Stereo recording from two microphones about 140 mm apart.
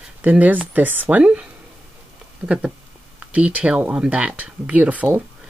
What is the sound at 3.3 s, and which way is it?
Speech, 10° right (ahead or behind).